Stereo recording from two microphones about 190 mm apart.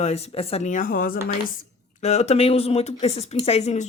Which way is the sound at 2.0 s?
35° left (ahead or behind).